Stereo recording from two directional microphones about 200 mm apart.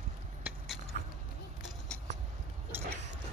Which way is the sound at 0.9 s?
40° right (ahead or behind).